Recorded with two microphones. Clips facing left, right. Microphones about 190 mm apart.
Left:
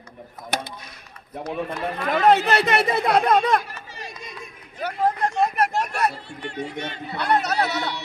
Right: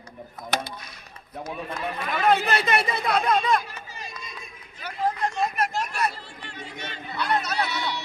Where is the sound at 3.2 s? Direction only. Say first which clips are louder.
Left 4 dB; 65° left (ahead or behind).